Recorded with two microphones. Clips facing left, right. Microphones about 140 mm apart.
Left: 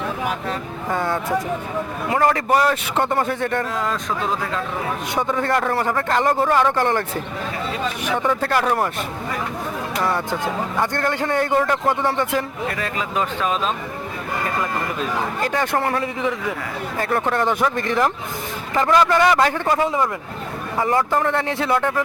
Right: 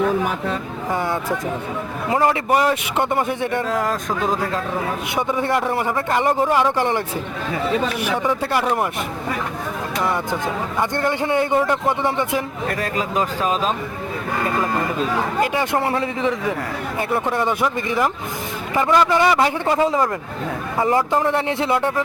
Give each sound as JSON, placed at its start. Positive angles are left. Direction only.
{"t": 0.9, "sound": "speech", "side_deg": -15}
{"t": 2.0, "sound": "a man's voice", "side_deg": -25}
{"t": 2.3, "sound": "speech", "side_deg": -15}
{"t": 5.1, "sound": "speech", "side_deg": -15}
{"t": 8.1, "sound": "speech", "side_deg": -10}
{"t": 10.0, "sound": "speech", "side_deg": -15}
{"t": 12.7, "sound": "speech", "side_deg": -40}
{"t": 15.4, "sound": "a man's voice", "side_deg": -15}
{"t": 17.0, "sound": "speech", "side_deg": -10}
{"t": 20.8, "sound": "a man's voice", "side_deg": -20}